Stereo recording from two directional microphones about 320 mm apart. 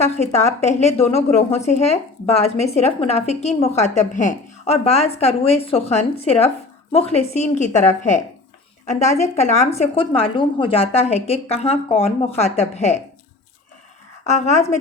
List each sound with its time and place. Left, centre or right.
0.0 s speech: centre
14.3 s speech: left